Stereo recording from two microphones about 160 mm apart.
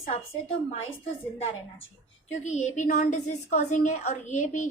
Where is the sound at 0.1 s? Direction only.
40° left (ahead or behind).